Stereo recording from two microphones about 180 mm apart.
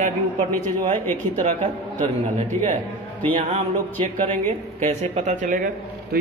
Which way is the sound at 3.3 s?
40° right (ahead or behind).